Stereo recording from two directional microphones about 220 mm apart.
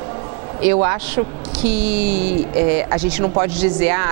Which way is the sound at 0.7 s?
15° right (ahead or behind).